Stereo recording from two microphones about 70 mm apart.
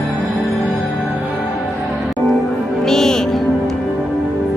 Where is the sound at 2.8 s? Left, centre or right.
Centre.